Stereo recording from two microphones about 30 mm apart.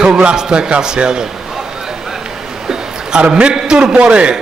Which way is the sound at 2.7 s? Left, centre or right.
Right.